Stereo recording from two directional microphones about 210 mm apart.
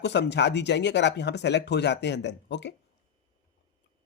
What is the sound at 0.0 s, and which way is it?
Speech, 55° left (ahead or behind).